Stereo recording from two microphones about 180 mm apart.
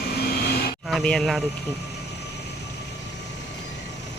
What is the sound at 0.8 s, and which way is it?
Speech, centre (ahead or behind).